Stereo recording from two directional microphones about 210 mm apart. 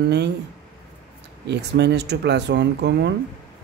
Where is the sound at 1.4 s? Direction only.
55° right (ahead or behind).